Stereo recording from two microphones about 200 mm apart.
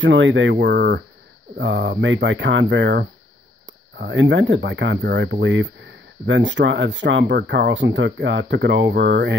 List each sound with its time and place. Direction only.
0.0 s speech: 65° right (ahead or behind)